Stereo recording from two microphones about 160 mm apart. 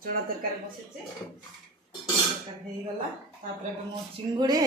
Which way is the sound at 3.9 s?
25° right (ahead or behind).